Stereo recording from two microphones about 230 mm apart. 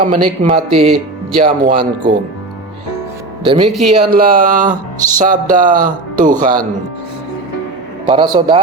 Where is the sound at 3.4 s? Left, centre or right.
Right.